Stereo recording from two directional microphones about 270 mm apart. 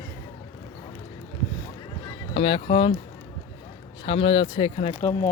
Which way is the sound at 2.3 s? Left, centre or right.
Centre.